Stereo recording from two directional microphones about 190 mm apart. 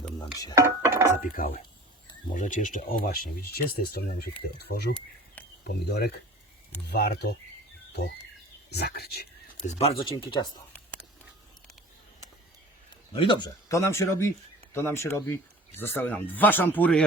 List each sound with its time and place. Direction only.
0.5 s dishes: 15° right (ahead or behind)
1.4 s speech: 45° left (ahead or behind)
8.7 s speech: 55° left (ahead or behind)
9.6 s speech: 30° left (ahead or behind)
13.1 s speech: 25° left (ahead or behind); by 17.1 s 5° left (ahead or behind)